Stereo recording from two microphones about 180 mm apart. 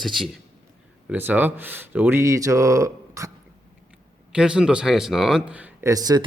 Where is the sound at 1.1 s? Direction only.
10° right (ahead or behind).